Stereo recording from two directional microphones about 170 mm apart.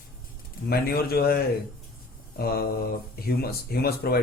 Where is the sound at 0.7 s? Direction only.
65° left (ahead or behind).